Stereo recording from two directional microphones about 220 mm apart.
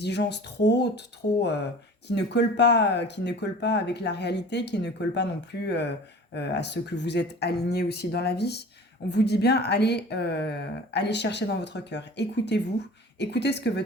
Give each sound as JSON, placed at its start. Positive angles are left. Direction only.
{"t": 0.0, "sound": "speech", "side_deg": 50}